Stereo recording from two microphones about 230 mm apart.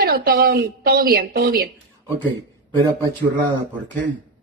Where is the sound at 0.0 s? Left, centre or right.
Right.